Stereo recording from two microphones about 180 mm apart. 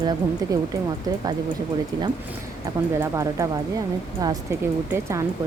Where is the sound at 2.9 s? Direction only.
15° right (ahead or behind).